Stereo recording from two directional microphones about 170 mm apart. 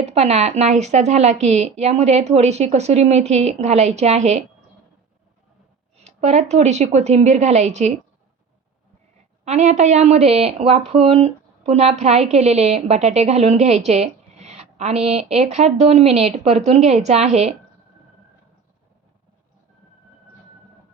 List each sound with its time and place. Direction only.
0.0 s a woman's voice: 40° right (ahead or behind)
6.0 s a woman's voice: 40° right (ahead or behind)
9.4 s a woman's voice: 40° right (ahead or behind)